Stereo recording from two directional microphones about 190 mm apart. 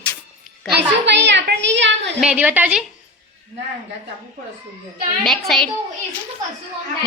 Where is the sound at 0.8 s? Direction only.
65° right (ahead or behind).